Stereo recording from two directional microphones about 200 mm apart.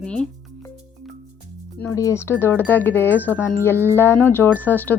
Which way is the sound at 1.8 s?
15° left (ahead or behind).